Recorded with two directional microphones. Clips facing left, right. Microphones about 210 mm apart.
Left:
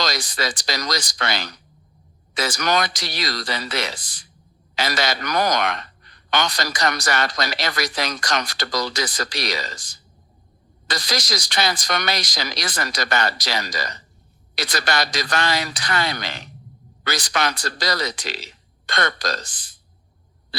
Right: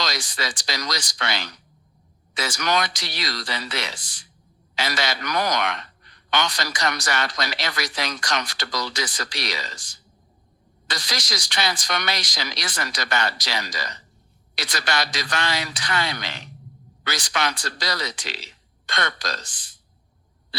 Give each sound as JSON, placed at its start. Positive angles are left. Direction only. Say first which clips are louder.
{"t": 0.0, "sound": "a man's voice", "louder": "left 4 dB", "side_deg": 40}